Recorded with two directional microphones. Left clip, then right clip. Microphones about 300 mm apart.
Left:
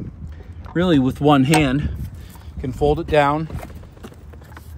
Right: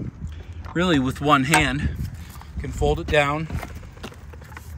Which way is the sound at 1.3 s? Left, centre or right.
Centre.